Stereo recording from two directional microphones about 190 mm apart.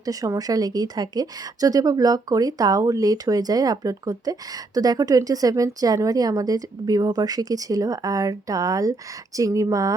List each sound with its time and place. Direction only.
0.0 s a woman's voice: 20° right (ahead or behind)